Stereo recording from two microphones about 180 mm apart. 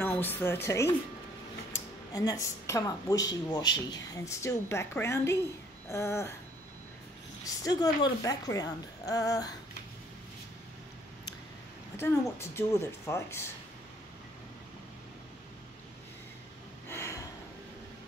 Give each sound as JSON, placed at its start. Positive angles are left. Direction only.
{"t": 0.0, "sound": "speech", "side_deg": 10}
{"t": 7.4, "sound": "a woman's voice", "side_deg": 20}
{"t": 12.0, "sound": "speech", "side_deg": 15}
{"t": 16.9, "sound": "a sound", "side_deg": 15}